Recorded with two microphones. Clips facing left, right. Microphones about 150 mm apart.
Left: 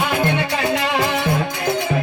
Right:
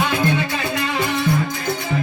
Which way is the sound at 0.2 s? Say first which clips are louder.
Left 1 dB; 70° left (ahead or behind).